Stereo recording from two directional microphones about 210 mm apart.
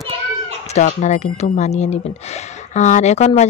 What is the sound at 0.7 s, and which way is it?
Speech, 35° left (ahead or behind).